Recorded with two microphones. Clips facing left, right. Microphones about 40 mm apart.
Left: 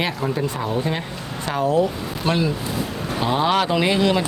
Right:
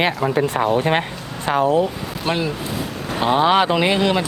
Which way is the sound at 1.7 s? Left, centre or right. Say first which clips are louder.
Right 1 dB; centre.